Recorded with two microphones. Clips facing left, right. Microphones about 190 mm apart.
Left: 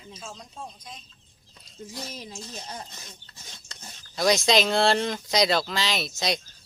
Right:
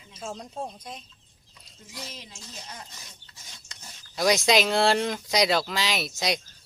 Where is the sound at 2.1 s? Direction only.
35° left (ahead or behind).